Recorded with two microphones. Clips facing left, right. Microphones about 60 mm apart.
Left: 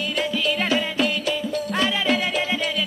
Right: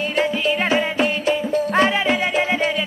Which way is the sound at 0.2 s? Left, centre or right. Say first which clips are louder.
Right 4 dB; right.